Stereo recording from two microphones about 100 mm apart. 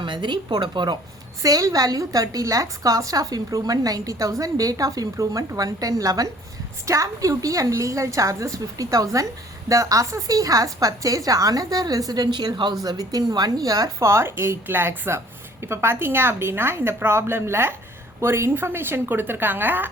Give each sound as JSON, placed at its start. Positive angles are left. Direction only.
{"t": 0.0, "sound": "a woman's voice", "side_deg": -50}
{"t": 1.4, "sound": "a woman's voice", "side_deg": -35}